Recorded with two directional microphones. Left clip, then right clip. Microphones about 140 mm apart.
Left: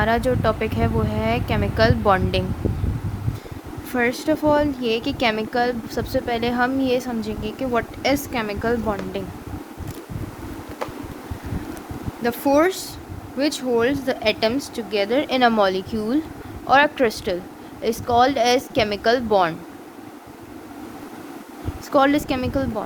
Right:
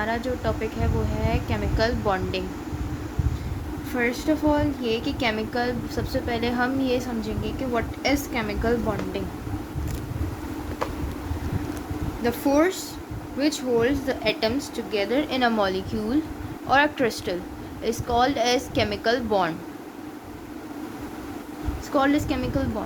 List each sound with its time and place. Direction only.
0.0 s speech: 50° left (ahead or behind)
3.9 s a woman's voice: 55° left (ahead or behind)
12.2 s a woman's voice: 45° left (ahead or behind)
21.9 s a woman's voice: 60° left (ahead or behind)